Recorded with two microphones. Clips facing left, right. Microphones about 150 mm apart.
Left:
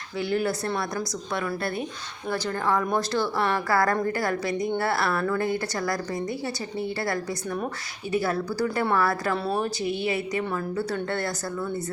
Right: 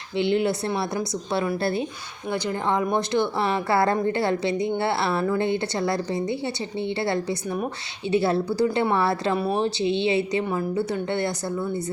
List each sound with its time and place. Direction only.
0.2 s a woman's voice: 25° right (ahead or behind)
10.4 s a woman's voice: 15° right (ahead or behind)